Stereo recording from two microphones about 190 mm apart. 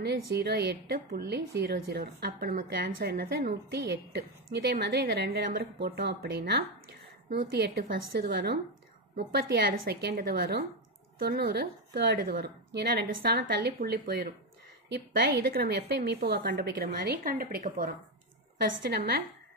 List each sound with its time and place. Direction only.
0.0 s a woman's voice: 60° right (ahead or behind)